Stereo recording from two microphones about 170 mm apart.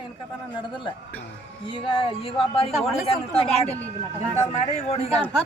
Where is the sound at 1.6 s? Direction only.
30° left (ahead or behind).